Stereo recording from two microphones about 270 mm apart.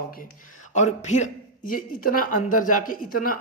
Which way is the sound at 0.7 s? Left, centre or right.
Left.